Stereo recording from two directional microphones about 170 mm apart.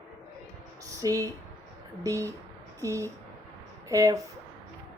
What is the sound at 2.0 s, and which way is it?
Speech, 20° right (ahead or behind).